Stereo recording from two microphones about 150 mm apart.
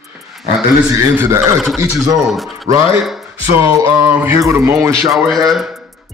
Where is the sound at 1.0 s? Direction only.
15° right (ahead or behind).